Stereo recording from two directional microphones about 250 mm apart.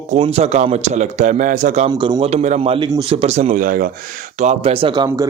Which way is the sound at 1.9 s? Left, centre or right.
Centre.